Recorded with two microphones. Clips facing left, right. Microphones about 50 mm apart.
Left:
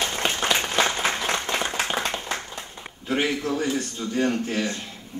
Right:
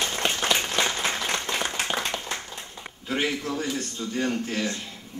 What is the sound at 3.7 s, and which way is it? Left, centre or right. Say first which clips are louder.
A man's voice: left 3 dB; centre.